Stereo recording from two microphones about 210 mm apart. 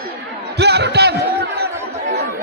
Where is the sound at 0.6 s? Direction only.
50° right (ahead or behind).